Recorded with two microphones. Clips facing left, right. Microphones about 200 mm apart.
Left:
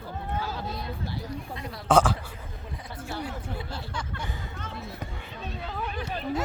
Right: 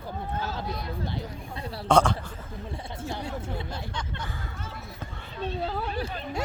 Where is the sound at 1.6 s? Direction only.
30° right (ahead or behind).